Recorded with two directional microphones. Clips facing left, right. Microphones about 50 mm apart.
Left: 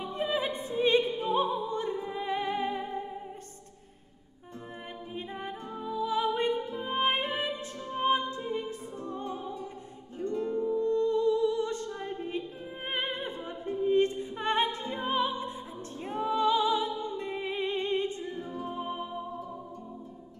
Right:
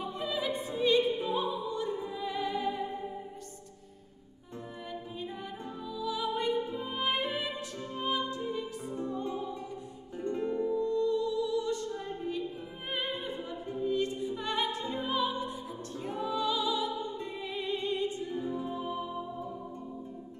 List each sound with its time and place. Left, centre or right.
0.1 s opera: left
5.3 s music: left
10.2 s music: right
10.9 s music: left